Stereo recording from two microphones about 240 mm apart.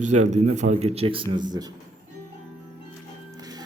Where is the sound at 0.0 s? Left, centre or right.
Right.